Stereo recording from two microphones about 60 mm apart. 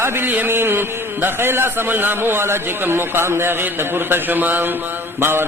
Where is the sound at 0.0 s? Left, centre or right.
Right.